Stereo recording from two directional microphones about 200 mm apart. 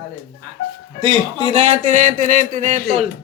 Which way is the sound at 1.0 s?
30° right (ahead or behind).